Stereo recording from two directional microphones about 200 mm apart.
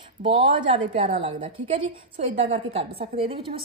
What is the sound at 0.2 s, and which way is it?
A woman's voice, 30° right (ahead or behind).